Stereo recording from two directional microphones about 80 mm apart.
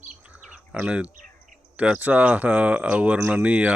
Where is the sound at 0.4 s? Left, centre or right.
Centre.